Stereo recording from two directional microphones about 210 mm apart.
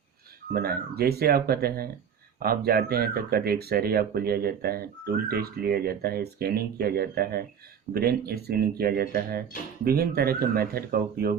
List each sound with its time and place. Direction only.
0.5 s speech: 45° right (ahead or behind)